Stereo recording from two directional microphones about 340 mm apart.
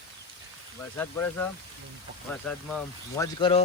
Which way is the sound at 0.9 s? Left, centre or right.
Centre.